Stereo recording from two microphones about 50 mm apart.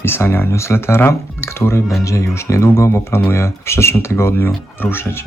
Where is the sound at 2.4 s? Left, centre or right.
Left.